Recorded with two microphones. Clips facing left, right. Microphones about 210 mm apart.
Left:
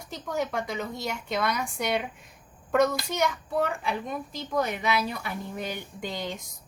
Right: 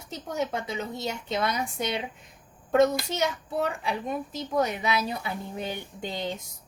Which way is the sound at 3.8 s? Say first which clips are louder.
Right 1 dB; 25° right (ahead or behind).